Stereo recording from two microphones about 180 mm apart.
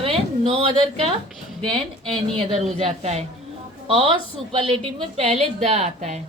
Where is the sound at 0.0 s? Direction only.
30° right (ahead or behind).